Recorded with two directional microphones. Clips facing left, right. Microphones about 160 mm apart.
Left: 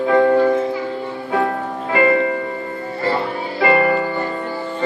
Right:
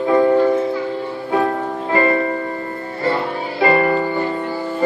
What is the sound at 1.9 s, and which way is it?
Music, 35° right (ahead or behind).